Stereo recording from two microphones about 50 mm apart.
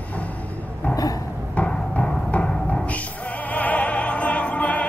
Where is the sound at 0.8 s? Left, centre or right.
Left.